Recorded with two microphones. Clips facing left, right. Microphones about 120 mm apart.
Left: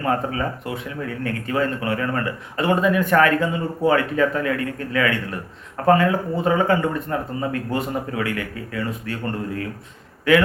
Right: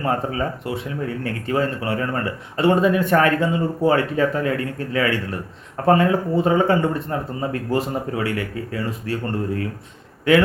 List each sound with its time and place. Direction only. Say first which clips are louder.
0.0 s a man's voice: even; 30° right (ahead or behind)